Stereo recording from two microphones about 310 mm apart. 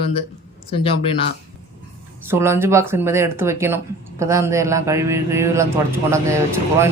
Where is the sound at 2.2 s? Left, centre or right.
Centre.